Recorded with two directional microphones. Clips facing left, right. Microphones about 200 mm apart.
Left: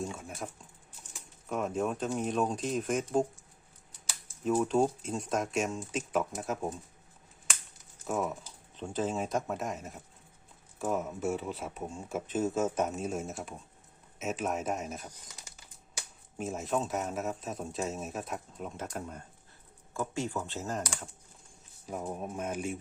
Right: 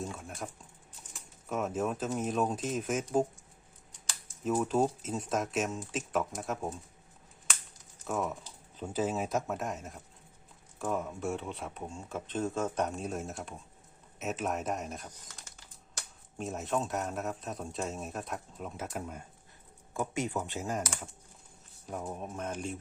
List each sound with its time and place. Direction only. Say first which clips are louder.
0.0 s a sound: left 1 dB; centre (ahead or behind)
1.1 s speech: even; centre (ahead or behind)
8.0 s speech: left 1 dB; centre (ahead or behind)
19.9 s speech: right 1 dB; 20° right (ahead or behind); by 22.8 s 10° left (ahead or behind)